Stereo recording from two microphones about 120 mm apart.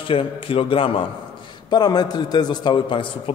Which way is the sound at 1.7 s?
35° left (ahead or behind).